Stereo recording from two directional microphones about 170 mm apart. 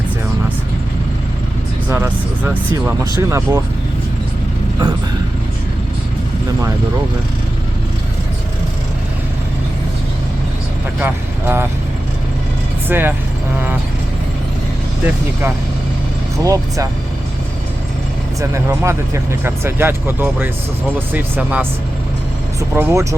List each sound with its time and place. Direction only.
1.9 s speech: 10° right (ahead or behind)
11.0 s speech: 10° right (ahead or behind)
12.9 s speech: 10° right (ahead or behind)
16.4 s speech: 20° right (ahead or behind)
18.3 s speech: 20° right (ahead or behind)
22.7 s speech: 15° right (ahead or behind)